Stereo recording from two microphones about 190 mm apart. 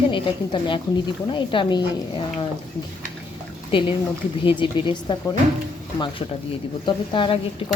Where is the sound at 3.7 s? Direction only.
25° left (ahead or behind).